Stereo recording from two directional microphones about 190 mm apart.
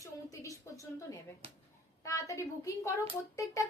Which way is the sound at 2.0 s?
15° left (ahead or behind).